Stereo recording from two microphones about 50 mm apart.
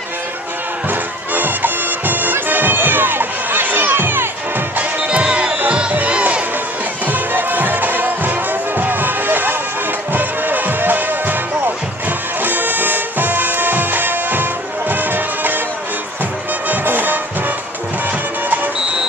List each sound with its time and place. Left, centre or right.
0.8 s music: right
4.7 s music: right
7.1 s music: right
16.6 s music: right